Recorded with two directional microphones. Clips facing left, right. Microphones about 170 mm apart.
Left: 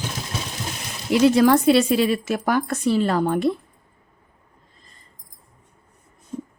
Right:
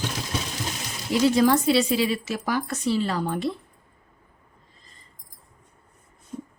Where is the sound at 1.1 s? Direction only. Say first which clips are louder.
Left 4 dB; 65° left (ahead or behind).